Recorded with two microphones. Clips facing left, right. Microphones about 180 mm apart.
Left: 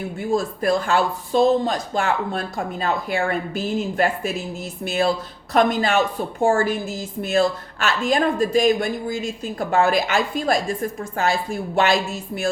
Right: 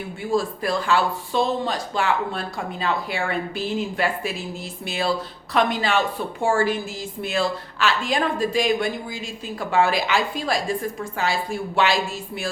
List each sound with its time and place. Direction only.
0.2 s a woman's voice: 45° left (ahead or behind)